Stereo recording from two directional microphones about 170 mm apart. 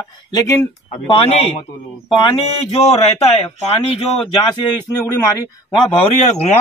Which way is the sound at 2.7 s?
40° left (ahead or behind).